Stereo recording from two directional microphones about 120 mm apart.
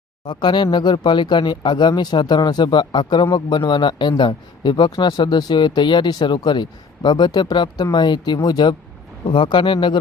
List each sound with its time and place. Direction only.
0.3 s a man's voice: 40° left (ahead or behind)